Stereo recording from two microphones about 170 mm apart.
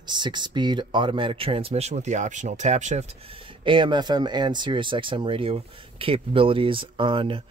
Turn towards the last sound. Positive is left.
turn(degrees=-30)  # may be behind; listen again after turning